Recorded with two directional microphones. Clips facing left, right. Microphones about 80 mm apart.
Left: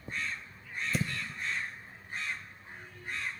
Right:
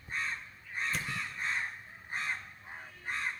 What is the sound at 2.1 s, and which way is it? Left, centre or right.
Crow, right.